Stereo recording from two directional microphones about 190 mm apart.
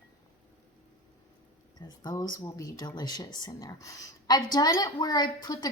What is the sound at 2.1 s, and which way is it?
Speech, 20° left (ahead or behind).